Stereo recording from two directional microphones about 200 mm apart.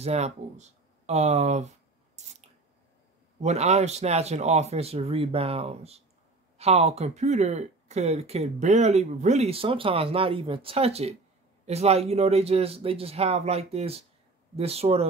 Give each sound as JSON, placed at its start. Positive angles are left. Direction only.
{"t": 0.0, "sound": "speech", "side_deg": -35}
{"t": 2.2, "sound": "a sound", "side_deg": -35}
{"t": 3.3, "sound": "speech", "side_deg": -35}